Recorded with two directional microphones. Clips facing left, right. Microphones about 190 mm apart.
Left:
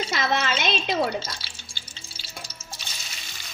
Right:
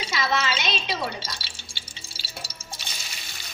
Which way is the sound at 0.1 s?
50° left (ahead or behind).